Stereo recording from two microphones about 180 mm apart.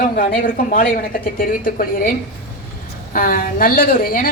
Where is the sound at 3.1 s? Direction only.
50° left (ahead or behind).